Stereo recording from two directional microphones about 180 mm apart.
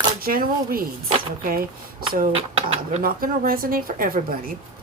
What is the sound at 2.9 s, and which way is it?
Speech, 50° right (ahead or behind).